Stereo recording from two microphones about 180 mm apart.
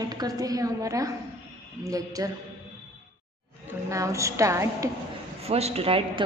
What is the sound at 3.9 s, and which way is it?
Speech, 15° right (ahead or behind).